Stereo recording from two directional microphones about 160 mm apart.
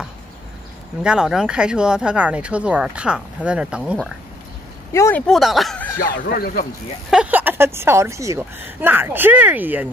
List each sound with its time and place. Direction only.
1.0 s speech: 5° right (ahead or behind)
4.9 s speech: 15° left (ahead or behind)
5.2 s speech: centre (ahead or behind)
5.9 s speech: 70° left (ahead or behind)
7.1 s a woman's voice: 10° right (ahead or behind)